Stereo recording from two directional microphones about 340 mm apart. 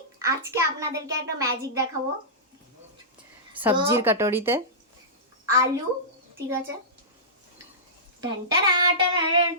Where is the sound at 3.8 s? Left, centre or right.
Centre.